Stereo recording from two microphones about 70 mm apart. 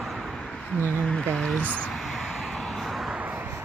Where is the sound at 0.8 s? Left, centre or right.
Left.